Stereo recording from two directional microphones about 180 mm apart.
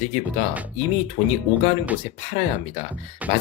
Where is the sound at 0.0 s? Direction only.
40° left (ahead or behind).